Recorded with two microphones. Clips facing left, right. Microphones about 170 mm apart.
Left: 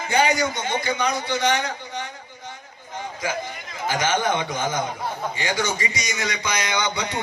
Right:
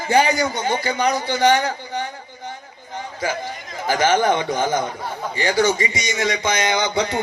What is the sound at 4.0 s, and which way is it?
A man's voice, 35° right (ahead or behind).